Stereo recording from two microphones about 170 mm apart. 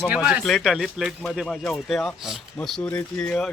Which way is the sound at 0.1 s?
5° right (ahead or behind).